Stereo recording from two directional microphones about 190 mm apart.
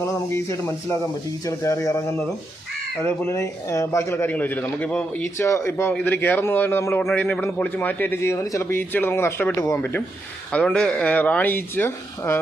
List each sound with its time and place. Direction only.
0.0 s a man's voice: 15° left (ahead or behind)
1.5 s a man's voice: 15° left (ahead or behind)